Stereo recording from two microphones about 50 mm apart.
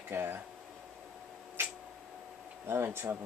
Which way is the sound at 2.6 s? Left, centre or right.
Right.